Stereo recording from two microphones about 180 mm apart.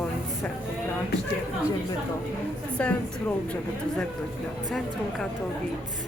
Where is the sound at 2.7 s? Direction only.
5° left (ahead or behind).